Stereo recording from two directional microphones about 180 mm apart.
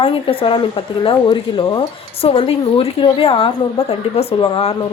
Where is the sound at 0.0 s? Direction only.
30° left (ahead or behind).